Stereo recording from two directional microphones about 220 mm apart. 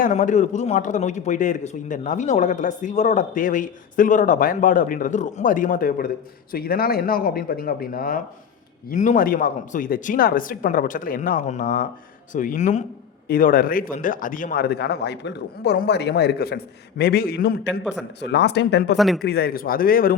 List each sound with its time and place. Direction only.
0.0 s a man's voice: 35° left (ahead or behind); by 18.9 s 50° left (ahead or behind)
18.9 s speech: centre (ahead or behind)
19.2 s a man's voice: 45° left (ahead or behind)